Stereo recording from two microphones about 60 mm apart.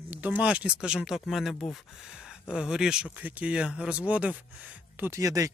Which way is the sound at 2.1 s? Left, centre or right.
Centre.